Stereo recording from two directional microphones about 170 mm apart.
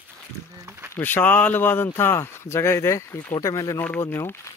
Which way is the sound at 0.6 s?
15° right (ahead or behind).